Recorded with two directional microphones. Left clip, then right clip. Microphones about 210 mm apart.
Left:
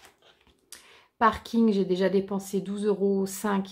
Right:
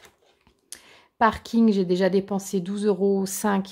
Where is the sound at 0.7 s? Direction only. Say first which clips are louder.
Right 3 dB; 40° right (ahead or behind).